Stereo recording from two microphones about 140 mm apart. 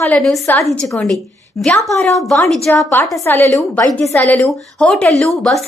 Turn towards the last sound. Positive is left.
turn(degrees=0)  # may be behind; listen again after turning